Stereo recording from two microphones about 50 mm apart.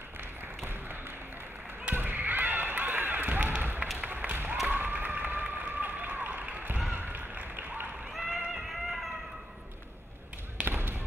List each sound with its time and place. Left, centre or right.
2.0 s a sound: right
4.0 s music: right
4.6 s run: right
6.9 s a sound: right
8.1 s cat: centre
10.7 s basketball bounce: right